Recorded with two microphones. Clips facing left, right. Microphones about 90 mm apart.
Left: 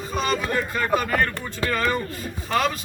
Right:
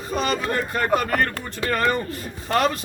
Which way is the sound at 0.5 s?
50° right (ahead or behind).